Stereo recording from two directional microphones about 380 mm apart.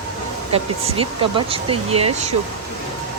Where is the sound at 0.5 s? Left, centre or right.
Centre.